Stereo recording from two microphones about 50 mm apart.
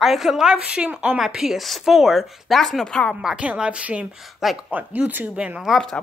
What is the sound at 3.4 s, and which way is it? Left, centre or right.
Speech, right.